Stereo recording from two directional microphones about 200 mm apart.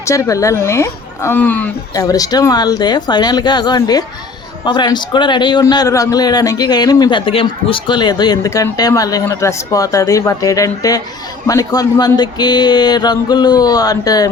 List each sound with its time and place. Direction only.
0.0 s a woman's voice: 15° left (ahead or behind)